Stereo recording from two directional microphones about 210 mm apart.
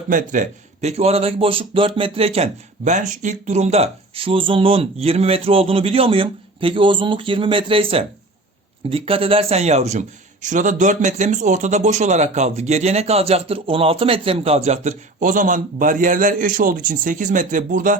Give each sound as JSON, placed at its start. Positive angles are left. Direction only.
{"t": 0.1, "sound": "a man's voice", "side_deg": -40}